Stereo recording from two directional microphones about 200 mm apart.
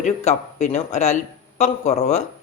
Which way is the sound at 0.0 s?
35° left (ahead or behind).